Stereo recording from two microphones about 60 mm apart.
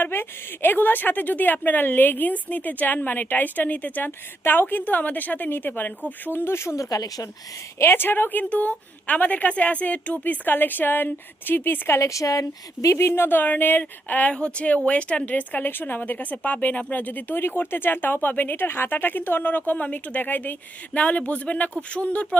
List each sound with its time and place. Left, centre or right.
0.0 s a woman's voice: left
6.7 s speech: left
7.8 s a woman's voice: left
11.9 s a woman's voice: left
13.0 s a woman's voice: left